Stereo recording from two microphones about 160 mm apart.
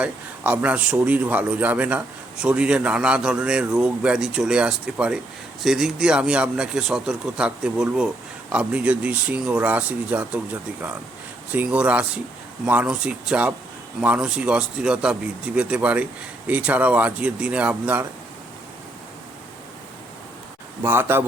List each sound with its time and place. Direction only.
0.0 s a man's voice: 10° right (ahead or behind)
20.8 s a man's voice: 15° right (ahead or behind)